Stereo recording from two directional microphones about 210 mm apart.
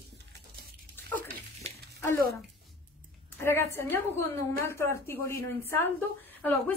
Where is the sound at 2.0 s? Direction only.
15° left (ahead or behind).